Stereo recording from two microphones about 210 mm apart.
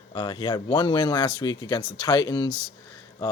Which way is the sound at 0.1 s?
20° left (ahead or behind).